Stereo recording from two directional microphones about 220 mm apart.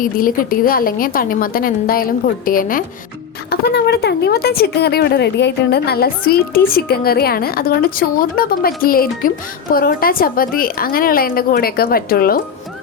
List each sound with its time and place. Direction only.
0.0 s a woman's voice: 40° left (ahead or behind)